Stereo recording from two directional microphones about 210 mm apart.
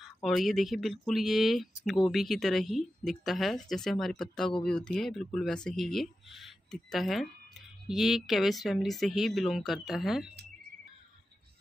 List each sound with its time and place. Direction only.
0.0 s speech: centre (ahead or behind)